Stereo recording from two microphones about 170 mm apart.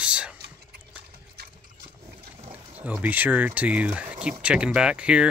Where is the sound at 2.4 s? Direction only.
35° right (ahead or behind).